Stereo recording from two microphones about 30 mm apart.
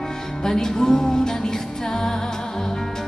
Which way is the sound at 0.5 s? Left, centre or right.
Centre.